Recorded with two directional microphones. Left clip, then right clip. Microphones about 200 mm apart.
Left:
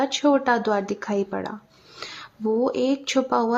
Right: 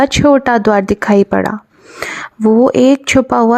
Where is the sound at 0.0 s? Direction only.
40° right (ahead or behind).